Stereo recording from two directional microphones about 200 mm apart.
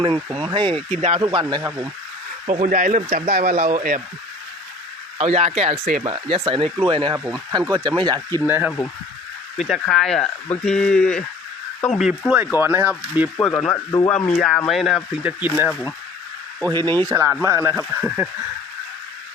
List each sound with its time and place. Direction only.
0.0 s speech: 25° right (ahead or behind)
2.5 s speech: 40° right (ahead or behind)
5.1 s speech: 30° right (ahead or behind)
8.4 s speech: 10° right (ahead or behind)
9.6 s speech: centre (ahead or behind)
13.3 s speech: 5° left (ahead or behind)
16.6 s speech: 20° right (ahead or behind)